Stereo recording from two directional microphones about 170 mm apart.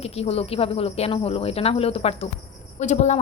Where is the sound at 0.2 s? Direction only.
35° left (ahead or behind).